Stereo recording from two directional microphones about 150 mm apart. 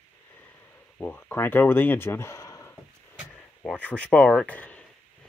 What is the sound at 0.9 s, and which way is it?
Speech, 10° left (ahead or behind).